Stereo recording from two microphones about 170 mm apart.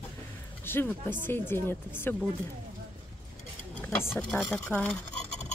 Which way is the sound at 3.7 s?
10° left (ahead or behind).